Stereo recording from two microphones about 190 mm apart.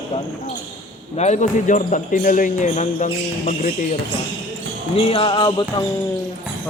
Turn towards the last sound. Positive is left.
turn(degrees=25)  # may be behind; listen again after turning